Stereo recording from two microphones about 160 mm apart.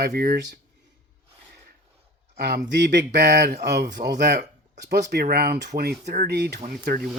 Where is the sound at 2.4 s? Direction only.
90° right; by 5.7 s 75° right (ahead or behind).